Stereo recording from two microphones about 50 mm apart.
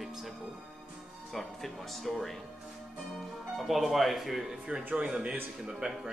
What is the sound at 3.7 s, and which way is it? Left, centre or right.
Speech, centre.